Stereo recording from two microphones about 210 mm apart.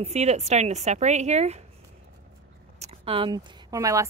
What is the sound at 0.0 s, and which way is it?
Speech, 30° right (ahead or behind).